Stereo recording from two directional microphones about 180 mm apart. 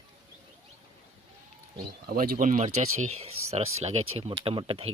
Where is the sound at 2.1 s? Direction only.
55° right (ahead or behind).